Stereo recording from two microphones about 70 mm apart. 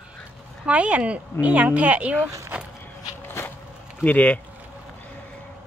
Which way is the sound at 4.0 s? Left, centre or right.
Centre.